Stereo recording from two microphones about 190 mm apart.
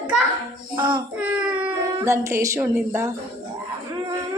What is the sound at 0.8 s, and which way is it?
Child singing, 25° right (ahead or behind).